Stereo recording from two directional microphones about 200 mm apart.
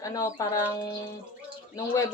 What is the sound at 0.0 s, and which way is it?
Speech, 15° left (ahead or behind).